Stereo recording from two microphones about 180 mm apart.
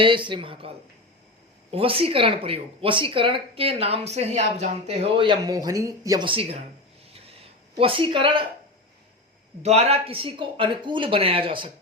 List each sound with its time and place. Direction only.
0.0 s a woman's voice: 25° right (ahead or behind)
7.8 s speech: 30° right (ahead or behind)
9.6 s speech: 35° right (ahead or behind)